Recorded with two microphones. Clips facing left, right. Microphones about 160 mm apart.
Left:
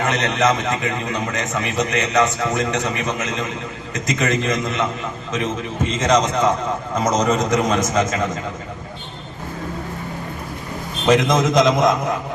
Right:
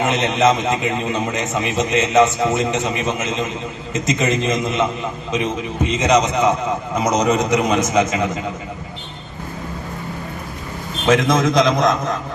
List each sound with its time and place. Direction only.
0.0 s a man's voice: 20° right (ahead or behind)
11.0 s a man's voice: centre (ahead or behind)